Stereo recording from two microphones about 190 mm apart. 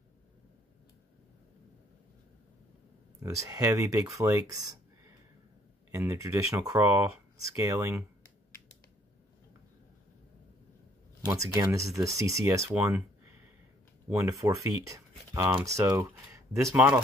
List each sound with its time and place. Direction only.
3.2 s speech: 15° right (ahead or behind)
5.9 s speech: 15° right (ahead or behind)
11.2 s speech: 15° right (ahead or behind)
14.1 s speech: 15° right (ahead or behind)